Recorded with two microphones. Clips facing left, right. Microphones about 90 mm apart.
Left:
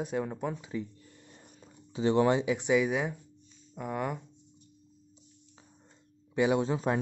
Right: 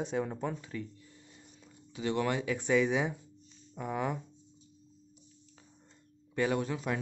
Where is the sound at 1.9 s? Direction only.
30° left (ahead or behind); by 4.2 s centre (ahead or behind).